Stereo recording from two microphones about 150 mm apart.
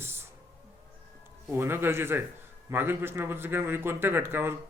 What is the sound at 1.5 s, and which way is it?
Speech, 15° right (ahead or behind).